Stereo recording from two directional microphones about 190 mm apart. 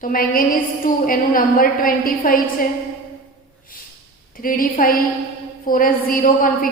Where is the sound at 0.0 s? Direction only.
45° left (ahead or behind).